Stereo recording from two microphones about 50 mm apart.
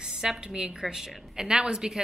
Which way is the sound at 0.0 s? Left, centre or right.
Centre.